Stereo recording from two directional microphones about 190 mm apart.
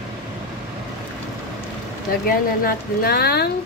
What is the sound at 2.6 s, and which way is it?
Speech, 55° left (ahead or behind).